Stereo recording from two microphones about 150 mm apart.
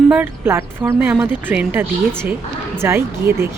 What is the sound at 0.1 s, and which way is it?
Speech, 15° right (ahead or behind).